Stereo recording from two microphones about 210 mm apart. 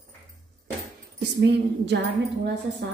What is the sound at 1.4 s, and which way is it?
Speech, 55° right (ahead or behind).